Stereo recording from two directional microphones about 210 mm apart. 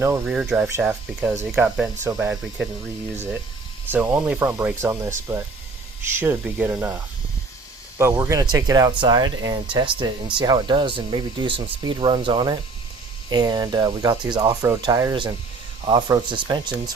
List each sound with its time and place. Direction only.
0.0 s speech: 10° right (ahead or behind)
3.9 s speech: 10° right (ahead or behind)